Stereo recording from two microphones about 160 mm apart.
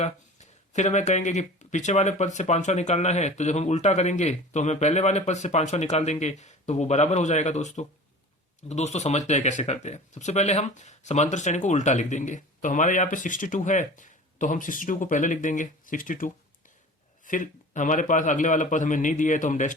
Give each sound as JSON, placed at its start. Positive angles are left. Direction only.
{"t": 0.0, "sound": "speech", "side_deg": 45}